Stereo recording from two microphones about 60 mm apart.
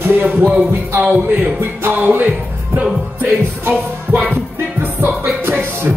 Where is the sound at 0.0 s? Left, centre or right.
Right.